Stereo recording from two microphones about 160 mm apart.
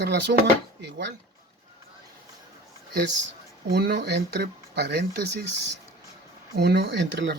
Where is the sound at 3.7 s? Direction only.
90° right.